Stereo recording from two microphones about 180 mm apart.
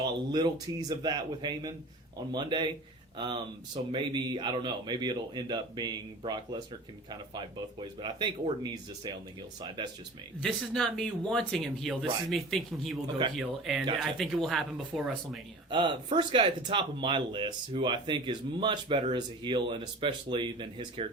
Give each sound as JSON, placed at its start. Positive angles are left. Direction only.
{"t": 0.0, "sound": "speech", "side_deg": -25}
{"t": 10.4, "sound": "speech", "side_deg": 5}
{"t": 15.7, "sound": "speech", "side_deg": -25}